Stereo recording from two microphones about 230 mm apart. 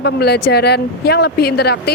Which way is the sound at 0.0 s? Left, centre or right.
Left.